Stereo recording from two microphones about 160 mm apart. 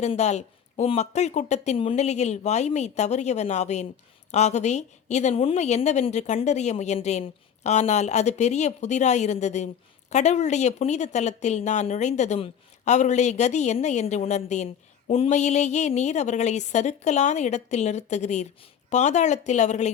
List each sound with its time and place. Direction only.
0.0 s speech: 45° left (ahead or behind)